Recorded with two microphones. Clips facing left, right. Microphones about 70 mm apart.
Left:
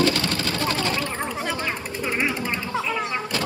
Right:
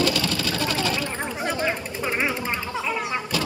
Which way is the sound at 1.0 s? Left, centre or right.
Right.